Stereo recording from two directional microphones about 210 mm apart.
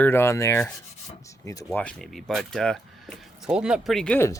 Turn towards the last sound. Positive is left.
turn(degrees=10)  # may be behind; listen again after turning